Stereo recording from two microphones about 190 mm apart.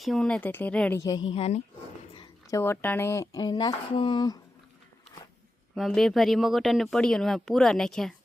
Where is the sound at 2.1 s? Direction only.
20° left (ahead or behind).